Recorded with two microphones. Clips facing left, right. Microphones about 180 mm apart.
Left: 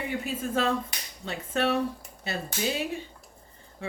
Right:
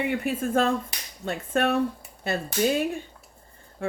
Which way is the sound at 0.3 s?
50° right (ahead or behind).